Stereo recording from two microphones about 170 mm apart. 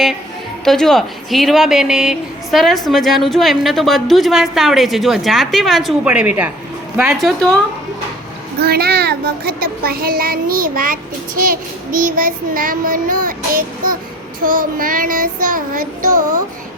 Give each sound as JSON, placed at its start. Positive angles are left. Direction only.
{"t": 0.6, "sound": "a woman's voice", "side_deg": 0}
{"t": 7.2, "sound": "a woman's voice", "side_deg": 0}
{"t": 8.6, "sound": "a child's voice", "side_deg": -65}
{"t": 14.4, "sound": "child singing", "side_deg": -55}